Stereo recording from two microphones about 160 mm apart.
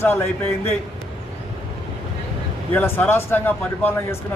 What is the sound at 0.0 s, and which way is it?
Speech, 15° left (ahead or behind).